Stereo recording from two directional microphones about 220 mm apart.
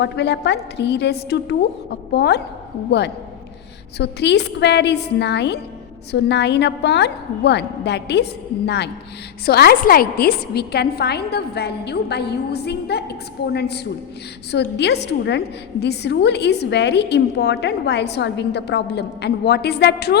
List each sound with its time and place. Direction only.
0.0 s a woman's voice: 50° left (ahead or behind)
3.9 s a woman's voice: 50° left (ahead or behind)